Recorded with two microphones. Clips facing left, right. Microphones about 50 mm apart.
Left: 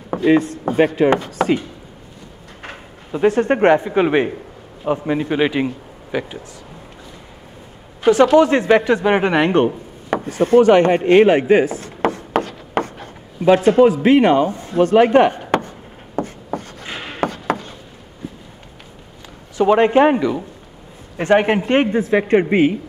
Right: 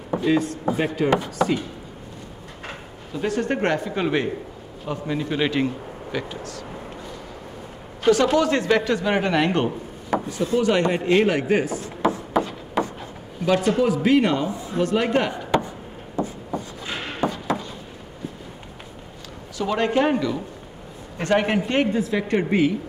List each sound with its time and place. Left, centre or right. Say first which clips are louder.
0.2 s speech: left 7 dB; left
2.6 s speech: left 2 dB; left
8.0 s speech: left 6 dB; left
10.0 s speech: left 5 dB; left
11.8 s a sound: left 2 dB; left
13.5 s speech: left 8 dB; left
16.2 s writing: left 3 dB; left
17.2 s a sound: left 4 dB; left
19.5 s speech: left 9 dB; left